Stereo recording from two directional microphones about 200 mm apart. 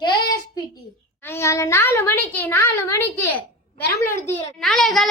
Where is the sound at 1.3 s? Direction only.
15° left (ahead or behind).